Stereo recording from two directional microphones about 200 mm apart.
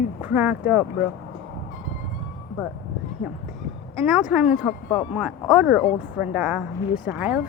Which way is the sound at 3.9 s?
Centre (ahead or behind).